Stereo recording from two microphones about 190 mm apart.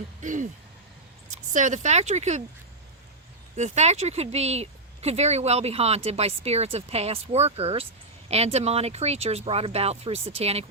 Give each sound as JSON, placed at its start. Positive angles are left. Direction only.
{"t": 0.2, "sound": "a sound", "side_deg": -40}
{"t": 1.5, "sound": "speech", "side_deg": -40}
{"t": 3.5, "sound": "speech", "side_deg": -35}